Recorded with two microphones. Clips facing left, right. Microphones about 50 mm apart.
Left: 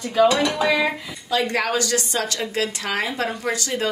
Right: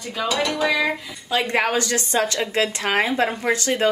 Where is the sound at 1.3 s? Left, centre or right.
Right.